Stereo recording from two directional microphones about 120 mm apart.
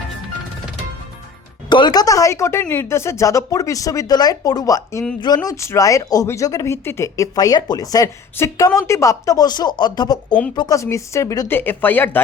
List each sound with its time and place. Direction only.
1.7 s a woman's voice: 35° left (ahead or behind)
10.8 s a woman's voice: 25° left (ahead or behind)